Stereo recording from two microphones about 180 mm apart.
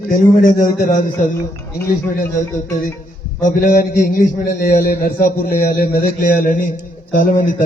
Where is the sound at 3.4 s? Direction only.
50° left (ahead or behind).